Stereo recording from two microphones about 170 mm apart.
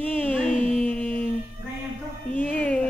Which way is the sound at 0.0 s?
10° left (ahead or behind).